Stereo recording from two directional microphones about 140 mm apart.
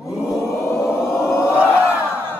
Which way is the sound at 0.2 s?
5° right (ahead or behind).